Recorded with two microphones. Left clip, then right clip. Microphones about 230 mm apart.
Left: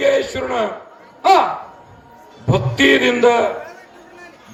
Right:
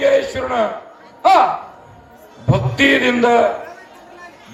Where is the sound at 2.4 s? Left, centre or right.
Left.